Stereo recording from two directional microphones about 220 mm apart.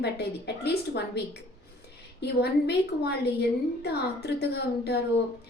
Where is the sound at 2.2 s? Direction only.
50° left (ahead or behind).